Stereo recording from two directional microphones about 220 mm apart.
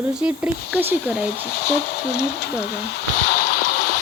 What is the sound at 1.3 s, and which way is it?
Speech, 50° left (ahead or behind).